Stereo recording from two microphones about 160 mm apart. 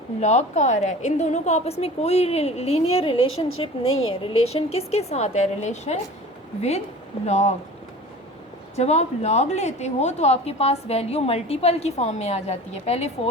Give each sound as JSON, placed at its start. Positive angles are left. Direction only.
{"t": 0.2, "sound": "a woman's voice", "side_deg": 45}
{"t": 8.7, "sound": "a woman's voice", "side_deg": 45}